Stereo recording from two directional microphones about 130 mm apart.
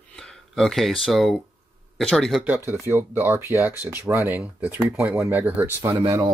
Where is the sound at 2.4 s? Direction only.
10° right (ahead or behind).